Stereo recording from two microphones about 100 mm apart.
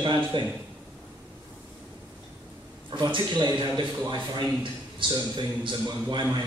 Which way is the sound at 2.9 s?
50° right (ahead or behind).